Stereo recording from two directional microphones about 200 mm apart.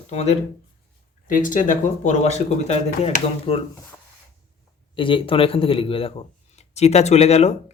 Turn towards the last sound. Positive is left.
turn(degrees=30)  # may be behind; listen again after turning